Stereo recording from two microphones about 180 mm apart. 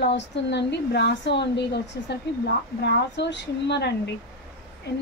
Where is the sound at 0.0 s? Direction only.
70° left (ahead or behind).